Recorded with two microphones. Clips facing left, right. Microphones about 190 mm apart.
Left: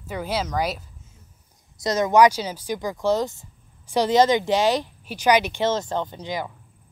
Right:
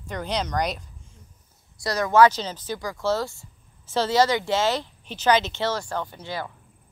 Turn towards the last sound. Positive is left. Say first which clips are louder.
# left 3 dB
turn(degrees=15)  # may be behind; listen again after turning